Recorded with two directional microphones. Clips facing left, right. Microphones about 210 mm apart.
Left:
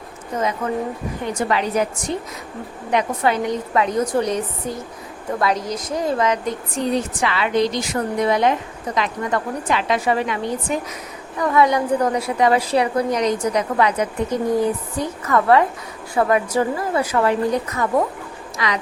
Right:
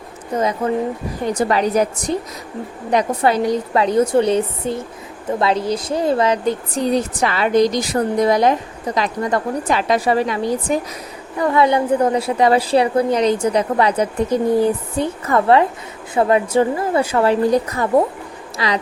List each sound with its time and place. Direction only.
0.3 s a woman's voice: 35° right (ahead or behind)